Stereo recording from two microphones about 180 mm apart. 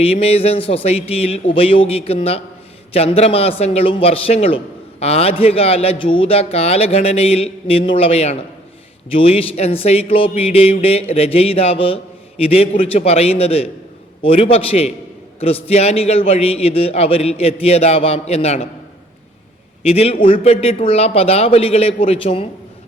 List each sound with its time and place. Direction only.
0.0 s a man's voice: 35° left (ahead or behind)
19.8 s a man's voice: 35° left (ahead or behind)